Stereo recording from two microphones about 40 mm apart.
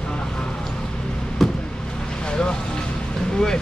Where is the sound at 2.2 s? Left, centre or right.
Left.